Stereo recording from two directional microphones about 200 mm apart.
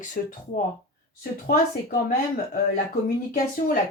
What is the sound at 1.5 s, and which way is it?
Speech, 50° left (ahead or behind).